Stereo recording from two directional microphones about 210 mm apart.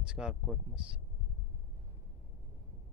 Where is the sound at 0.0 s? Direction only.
5° right (ahead or behind).